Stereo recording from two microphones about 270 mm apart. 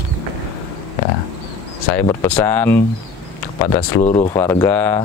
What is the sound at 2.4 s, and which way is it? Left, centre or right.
Speech, centre.